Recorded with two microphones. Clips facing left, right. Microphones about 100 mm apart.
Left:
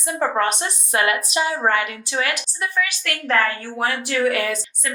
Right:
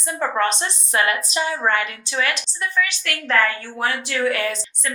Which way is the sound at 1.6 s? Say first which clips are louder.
Left 1 dB; 50° left (ahead or behind).